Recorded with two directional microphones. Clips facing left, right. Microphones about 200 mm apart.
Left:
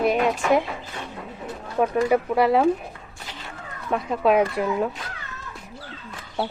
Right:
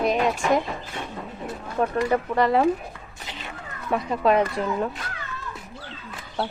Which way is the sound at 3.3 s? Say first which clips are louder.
Right 2 dB; 20° right (ahead or behind).